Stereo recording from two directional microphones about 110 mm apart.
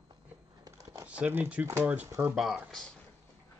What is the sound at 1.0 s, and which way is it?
Speech, 10° right (ahead or behind).